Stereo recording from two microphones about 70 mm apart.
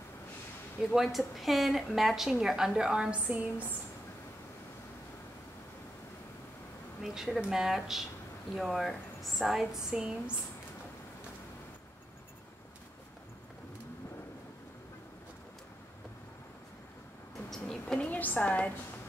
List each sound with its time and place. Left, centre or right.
0.9 s a woman's voice: centre
3.3 s speech: right
7.0 s a woman's voice: centre
17.5 s a sound: centre